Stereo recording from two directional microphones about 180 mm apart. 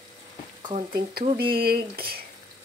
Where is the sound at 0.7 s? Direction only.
50° right (ahead or behind).